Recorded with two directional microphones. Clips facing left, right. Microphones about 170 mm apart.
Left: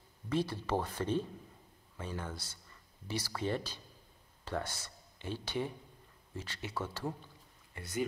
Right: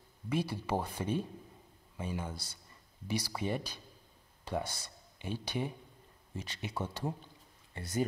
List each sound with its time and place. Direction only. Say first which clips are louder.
0.3 s speech: even; 10° right (ahead or behind)
7.7 s speech: right 2 dB; 35° right (ahead or behind)